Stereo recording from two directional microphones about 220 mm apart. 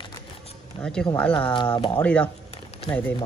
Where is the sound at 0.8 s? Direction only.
5° left (ahead or behind).